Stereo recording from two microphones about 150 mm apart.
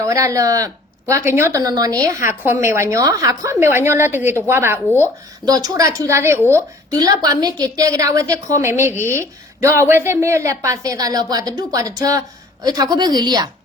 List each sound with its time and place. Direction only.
0.0 s a woman's voice: 20° right (ahead or behind)